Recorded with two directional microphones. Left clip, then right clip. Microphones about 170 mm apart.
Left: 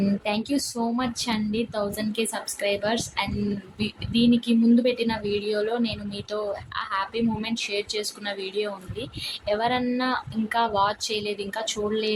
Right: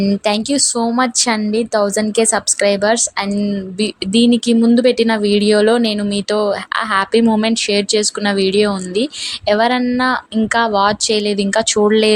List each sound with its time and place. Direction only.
0.3 s speech: 45° right (ahead or behind)